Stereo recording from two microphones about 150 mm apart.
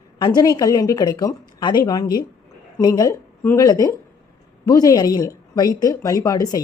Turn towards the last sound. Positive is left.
turn(degrees=25)  # may be behind; listen again after turning